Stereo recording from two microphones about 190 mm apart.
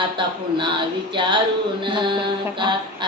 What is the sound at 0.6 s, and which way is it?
Child singing, 25° right (ahead or behind).